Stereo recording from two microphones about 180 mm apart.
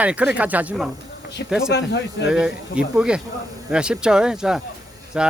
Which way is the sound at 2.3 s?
5° right (ahead or behind).